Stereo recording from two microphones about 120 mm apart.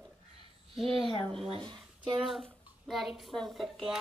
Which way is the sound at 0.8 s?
50° right (ahead or behind).